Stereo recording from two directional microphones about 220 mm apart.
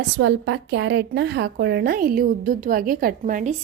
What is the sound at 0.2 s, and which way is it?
A woman's voice, 55° right (ahead or behind).